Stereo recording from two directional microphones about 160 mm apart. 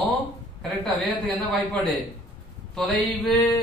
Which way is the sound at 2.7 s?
5° left (ahead or behind).